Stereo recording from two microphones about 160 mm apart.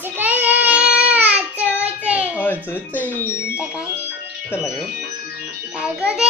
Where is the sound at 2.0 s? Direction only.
10° right (ahead or behind).